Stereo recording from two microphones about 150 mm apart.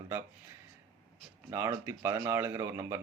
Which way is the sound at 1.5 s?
15° right (ahead or behind).